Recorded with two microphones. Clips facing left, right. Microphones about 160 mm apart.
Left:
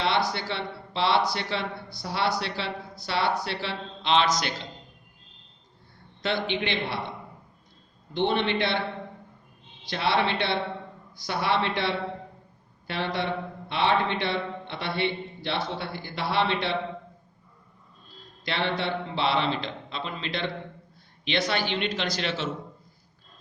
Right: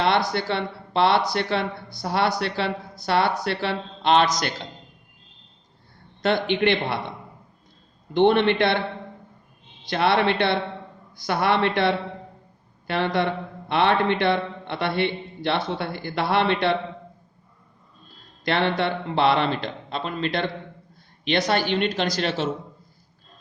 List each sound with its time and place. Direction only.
0.3 s a man's voice: 55° right (ahead or behind)
6.2 s a man's voice: 55° right (ahead or behind)
8.1 s a man's voice: 55° right (ahead or behind)
9.8 s a man's voice: 55° right (ahead or behind)
18.4 s a man's voice: 55° right (ahead or behind)